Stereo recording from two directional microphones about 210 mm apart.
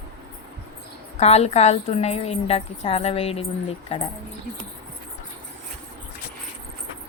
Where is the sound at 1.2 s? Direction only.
30° left (ahead or behind).